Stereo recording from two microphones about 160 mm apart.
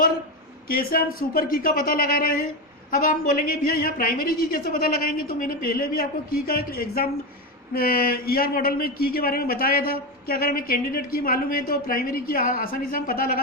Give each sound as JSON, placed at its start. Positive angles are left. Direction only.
{"t": 0.7, "sound": "speech", "side_deg": 70}